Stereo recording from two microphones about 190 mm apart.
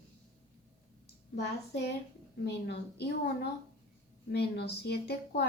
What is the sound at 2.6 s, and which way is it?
Speech, 60° left (ahead or behind).